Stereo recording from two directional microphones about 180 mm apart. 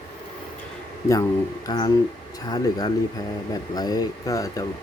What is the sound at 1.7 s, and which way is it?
A man's voice, 20° left (ahead or behind).